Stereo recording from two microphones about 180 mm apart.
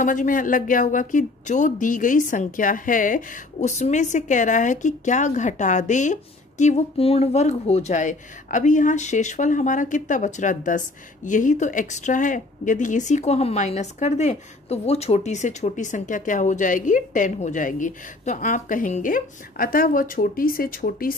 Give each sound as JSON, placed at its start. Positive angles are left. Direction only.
{"t": 0.0, "sound": "speech", "side_deg": 45}